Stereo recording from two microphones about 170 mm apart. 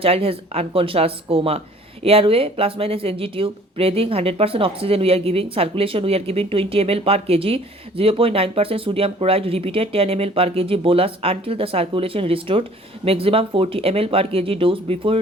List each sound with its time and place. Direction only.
0.0 s speech: 35° right (ahead or behind)